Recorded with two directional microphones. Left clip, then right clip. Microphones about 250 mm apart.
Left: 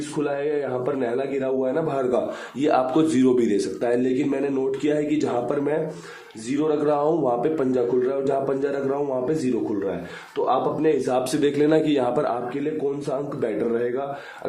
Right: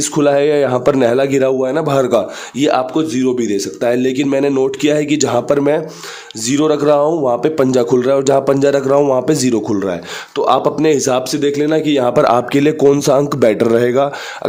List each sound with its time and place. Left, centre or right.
0.2 s a man's voice: right
10.3 s speech: right
11.3 s a man's voice: right